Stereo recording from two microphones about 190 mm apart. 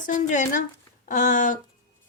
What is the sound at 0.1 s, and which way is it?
A woman's voice, 45° left (ahead or behind).